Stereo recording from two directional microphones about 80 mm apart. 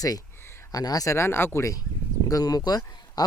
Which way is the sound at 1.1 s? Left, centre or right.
Left.